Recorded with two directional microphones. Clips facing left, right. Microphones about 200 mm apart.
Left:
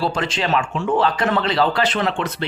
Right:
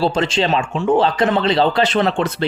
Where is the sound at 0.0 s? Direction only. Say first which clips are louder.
Right 5 dB; 25° right (ahead or behind).